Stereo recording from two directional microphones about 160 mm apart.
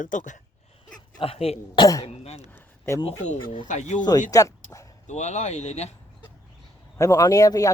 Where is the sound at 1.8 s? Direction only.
20° left (ahead or behind).